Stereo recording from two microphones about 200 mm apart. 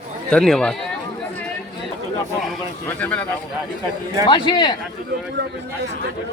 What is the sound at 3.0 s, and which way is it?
Speech, 10° left (ahead or behind).